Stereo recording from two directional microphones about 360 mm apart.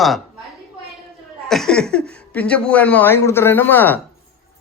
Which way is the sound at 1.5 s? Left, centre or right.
Centre.